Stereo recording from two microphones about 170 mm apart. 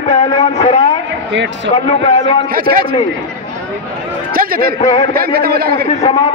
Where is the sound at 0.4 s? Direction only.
40° left (ahead or behind).